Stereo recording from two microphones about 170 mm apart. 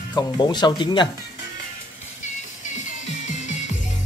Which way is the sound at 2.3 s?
45° left (ahead or behind).